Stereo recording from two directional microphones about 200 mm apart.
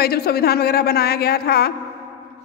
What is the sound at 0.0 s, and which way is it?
A woman's voice, 50° left (ahead or behind).